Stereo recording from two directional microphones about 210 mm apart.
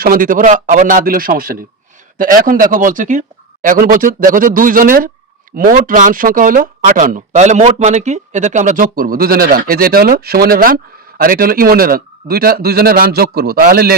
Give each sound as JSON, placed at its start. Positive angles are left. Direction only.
{"t": 0.0, "sound": "speech", "side_deg": -40}